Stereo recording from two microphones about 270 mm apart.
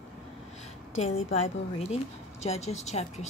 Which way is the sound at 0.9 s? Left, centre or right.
Left.